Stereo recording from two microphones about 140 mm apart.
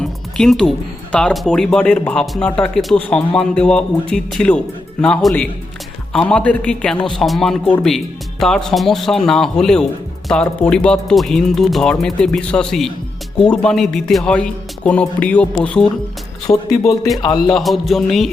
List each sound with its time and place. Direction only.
0.0 s music: 5° left (ahead or behind)
1.1 s a man's voice: 5° left (ahead or behind)
16.5 s speech: 30° left (ahead or behind)
17.5 s a man's voice: centre (ahead or behind)